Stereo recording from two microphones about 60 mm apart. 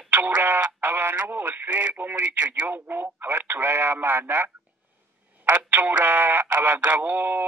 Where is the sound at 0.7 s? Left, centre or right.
Right.